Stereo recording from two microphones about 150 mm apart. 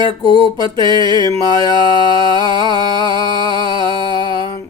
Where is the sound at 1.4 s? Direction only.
30° right (ahead or behind).